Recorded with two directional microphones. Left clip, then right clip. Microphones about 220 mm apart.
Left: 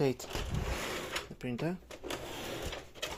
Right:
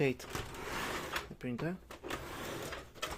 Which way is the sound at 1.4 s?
15° left (ahead or behind).